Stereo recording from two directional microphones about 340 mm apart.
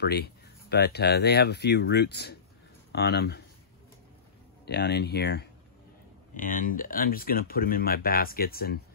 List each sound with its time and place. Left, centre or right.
0.0 s speech: left
4.6 s speech: left